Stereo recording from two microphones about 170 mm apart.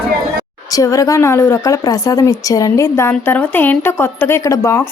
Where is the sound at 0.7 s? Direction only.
20° left (ahead or behind).